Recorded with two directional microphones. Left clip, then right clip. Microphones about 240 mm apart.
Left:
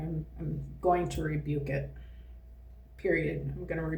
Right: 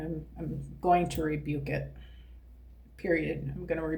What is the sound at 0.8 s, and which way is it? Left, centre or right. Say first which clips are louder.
Speech: right 2 dB; right.